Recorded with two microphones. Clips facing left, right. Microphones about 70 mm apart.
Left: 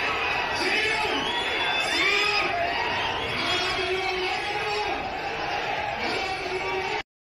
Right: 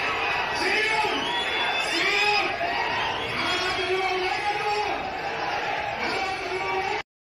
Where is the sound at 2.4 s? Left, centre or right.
Centre.